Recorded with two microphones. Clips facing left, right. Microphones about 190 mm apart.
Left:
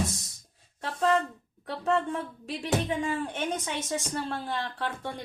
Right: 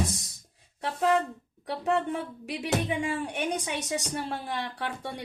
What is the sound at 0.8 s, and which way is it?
A woman's voice, 15° right (ahead or behind).